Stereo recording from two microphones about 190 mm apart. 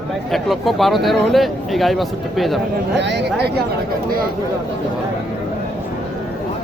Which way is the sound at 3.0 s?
65° right (ahead or behind).